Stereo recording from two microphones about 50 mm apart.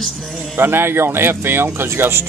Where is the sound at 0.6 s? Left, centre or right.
Right.